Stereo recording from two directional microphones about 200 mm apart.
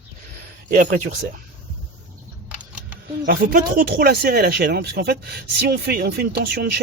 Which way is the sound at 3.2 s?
45° right (ahead or behind).